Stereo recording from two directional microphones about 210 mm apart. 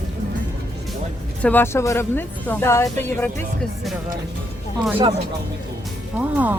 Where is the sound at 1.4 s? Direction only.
10° left (ahead or behind).